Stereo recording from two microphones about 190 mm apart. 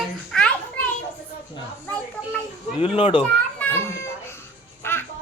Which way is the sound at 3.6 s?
10° left (ahead or behind).